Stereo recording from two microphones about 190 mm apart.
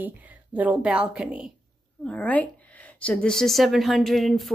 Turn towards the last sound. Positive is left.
turn(degrees=0)  # may be behind; listen again after turning